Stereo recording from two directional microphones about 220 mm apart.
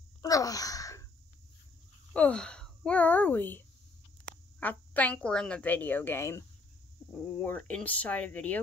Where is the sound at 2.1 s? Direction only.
5° left (ahead or behind).